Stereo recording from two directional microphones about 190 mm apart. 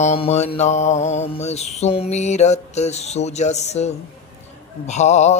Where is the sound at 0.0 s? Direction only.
35° left (ahead or behind).